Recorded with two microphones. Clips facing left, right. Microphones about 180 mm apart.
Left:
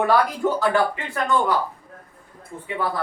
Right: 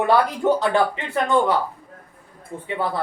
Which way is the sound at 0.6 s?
25° right (ahead or behind).